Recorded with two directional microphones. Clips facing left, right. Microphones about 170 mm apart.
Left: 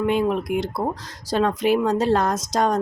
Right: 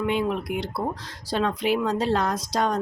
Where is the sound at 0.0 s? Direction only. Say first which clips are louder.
Left 4 dB; 45° left (ahead or behind).